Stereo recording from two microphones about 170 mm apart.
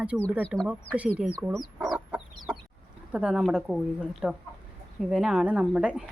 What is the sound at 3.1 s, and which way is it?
Speech, 5° right (ahead or behind).